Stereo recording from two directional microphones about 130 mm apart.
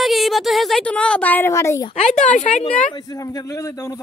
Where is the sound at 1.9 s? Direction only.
65° left (ahead or behind).